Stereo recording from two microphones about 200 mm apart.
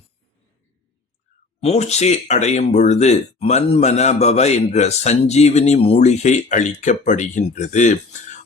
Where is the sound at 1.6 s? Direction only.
35° left (ahead or behind).